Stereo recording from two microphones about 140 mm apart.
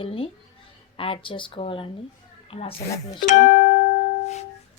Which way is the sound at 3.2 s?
60° left (ahead or behind).